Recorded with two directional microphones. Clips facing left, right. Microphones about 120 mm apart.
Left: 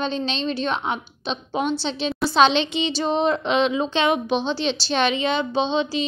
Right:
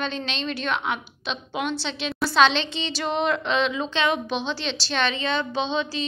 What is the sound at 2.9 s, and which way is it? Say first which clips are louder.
A woman's voice: left 2 dB; 35° left (ahead or behind).